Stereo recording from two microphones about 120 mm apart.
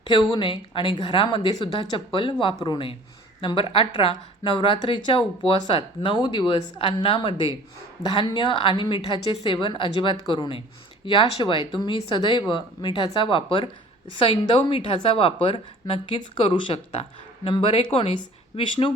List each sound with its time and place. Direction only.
0.1 s a woman's voice: 40° left (ahead or behind)